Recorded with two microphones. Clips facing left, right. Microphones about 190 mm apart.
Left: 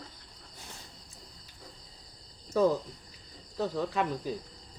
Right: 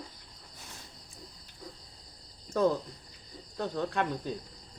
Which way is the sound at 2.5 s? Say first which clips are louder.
Left 1 dB; 5° left (ahead or behind).